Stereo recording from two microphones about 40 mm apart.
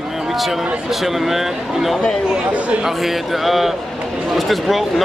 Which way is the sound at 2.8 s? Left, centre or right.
Centre.